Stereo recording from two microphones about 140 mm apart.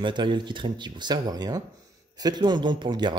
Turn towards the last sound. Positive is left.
turn(degrees=-30)  # may be behind; listen again after turning